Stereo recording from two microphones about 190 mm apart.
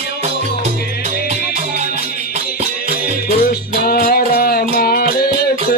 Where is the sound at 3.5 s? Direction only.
50° left (ahead or behind).